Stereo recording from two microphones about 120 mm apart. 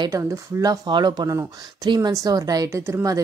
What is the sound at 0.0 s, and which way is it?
A woman's voice, 30° right (ahead or behind).